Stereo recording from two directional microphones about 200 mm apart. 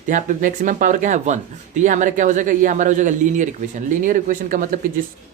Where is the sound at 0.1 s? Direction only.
40° right (ahead or behind).